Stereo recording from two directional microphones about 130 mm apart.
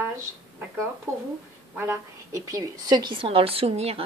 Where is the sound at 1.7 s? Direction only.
15° right (ahead or behind); by 4.0 s 50° right (ahead or behind).